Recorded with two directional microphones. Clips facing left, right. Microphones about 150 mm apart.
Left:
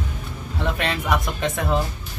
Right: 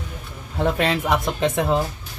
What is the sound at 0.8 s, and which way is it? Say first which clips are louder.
Speech: right 3 dB; 30° right (ahead or behind).